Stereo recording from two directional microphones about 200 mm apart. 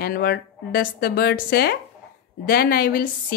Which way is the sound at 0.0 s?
50° left (ahead or behind).